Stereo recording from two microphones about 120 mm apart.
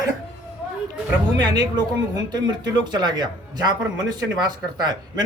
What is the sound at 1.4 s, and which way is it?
Speech, 35° right (ahead or behind).